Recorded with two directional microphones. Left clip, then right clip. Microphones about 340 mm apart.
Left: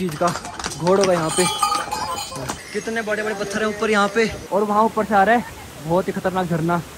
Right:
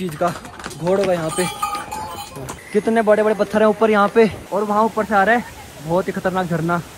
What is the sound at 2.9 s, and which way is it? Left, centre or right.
Speech, centre.